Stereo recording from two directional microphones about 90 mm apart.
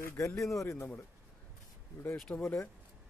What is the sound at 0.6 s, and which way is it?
Speech, 30° left (ahead or behind).